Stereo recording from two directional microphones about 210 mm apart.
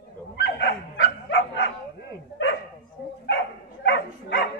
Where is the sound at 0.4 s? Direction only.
55° left (ahead or behind).